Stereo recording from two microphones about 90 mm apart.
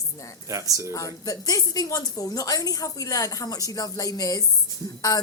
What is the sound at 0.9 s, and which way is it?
A woman's voice, 40° left (ahead or behind).